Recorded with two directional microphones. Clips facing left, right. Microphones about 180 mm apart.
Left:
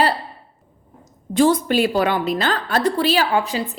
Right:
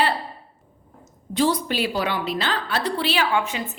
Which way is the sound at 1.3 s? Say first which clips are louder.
Left 6 dB; 50° left (ahead or behind).